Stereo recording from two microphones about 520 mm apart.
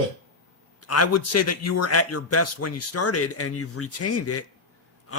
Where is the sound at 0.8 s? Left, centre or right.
Left.